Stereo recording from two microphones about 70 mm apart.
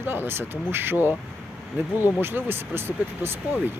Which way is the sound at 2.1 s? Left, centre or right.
Right.